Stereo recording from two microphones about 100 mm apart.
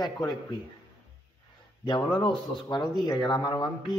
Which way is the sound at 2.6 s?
45° left (ahead or behind).